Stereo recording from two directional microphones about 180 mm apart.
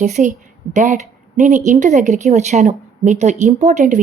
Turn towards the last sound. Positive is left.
turn(degrees=-40)  # may be behind; listen again after turning